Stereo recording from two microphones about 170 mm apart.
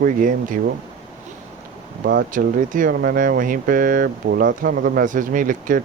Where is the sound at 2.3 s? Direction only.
50° right (ahead or behind).